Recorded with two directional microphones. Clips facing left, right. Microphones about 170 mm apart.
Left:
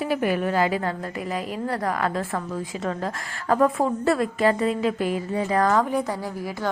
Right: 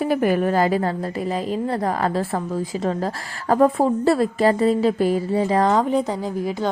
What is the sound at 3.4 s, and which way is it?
A woman's voice, 35° right (ahead or behind).